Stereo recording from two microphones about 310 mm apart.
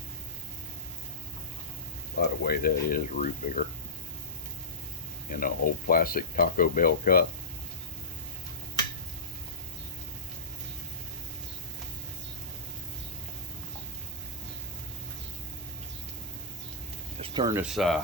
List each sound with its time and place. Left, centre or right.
2.4 s speech: left
5.3 s speech: left
17.2 s speech: centre